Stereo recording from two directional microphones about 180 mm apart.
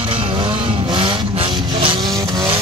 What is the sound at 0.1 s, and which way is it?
Vehicle, 30° right (ahead or behind).